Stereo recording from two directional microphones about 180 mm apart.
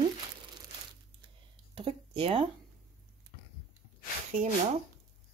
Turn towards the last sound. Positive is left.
turn(degrees=-40)  # may be behind; listen again after turning